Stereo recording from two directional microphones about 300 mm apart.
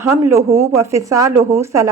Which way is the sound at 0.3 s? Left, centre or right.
Centre.